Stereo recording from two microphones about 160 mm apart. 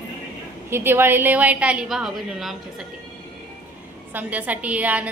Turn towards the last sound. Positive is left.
turn(degrees=-10)  # may be behind; listen again after turning